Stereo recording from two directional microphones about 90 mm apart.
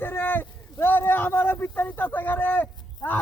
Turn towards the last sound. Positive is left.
turn(degrees=20)  # may be behind; listen again after turning